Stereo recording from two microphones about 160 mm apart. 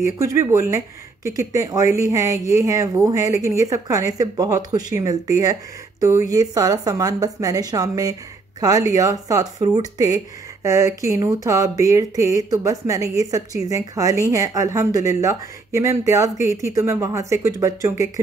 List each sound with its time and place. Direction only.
0.2 s speech: 20° right (ahead or behind)